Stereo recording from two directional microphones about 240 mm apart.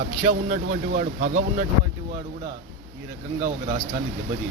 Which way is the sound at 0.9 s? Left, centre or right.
Right.